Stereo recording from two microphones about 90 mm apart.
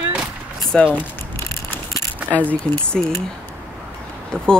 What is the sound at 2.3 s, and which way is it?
Speech, 15° left (ahead or behind).